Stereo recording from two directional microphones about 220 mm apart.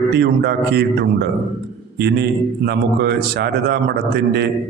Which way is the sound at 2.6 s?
50° right (ahead or behind).